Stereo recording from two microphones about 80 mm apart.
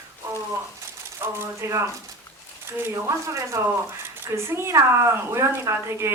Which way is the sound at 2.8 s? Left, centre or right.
Right.